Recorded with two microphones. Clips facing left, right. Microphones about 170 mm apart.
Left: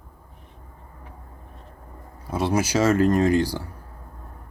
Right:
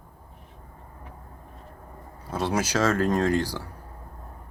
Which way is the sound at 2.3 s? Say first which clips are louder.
Left 3 dB; 10° left (ahead or behind).